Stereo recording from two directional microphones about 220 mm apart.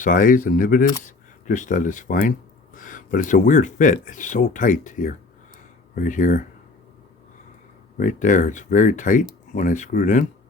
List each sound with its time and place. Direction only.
0.0 s speech: 40° left (ahead or behind)
7.9 s speech: 35° left (ahead or behind)